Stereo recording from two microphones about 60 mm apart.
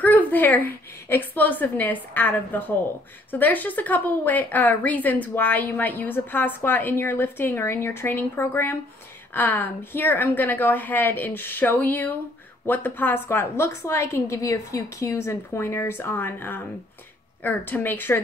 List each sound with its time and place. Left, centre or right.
0.0 s a woman's voice: left
17.4 s a woman's voice: left